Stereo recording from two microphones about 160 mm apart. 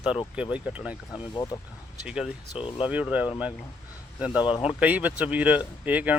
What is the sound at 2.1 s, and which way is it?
Speech, 5° right (ahead or behind).